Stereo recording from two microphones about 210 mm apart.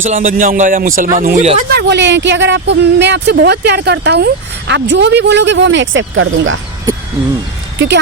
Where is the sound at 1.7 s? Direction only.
55° right (ahead or behind).